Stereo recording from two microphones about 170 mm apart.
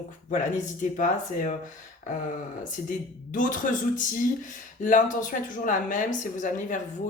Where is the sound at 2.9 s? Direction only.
50° left (ahead or behind).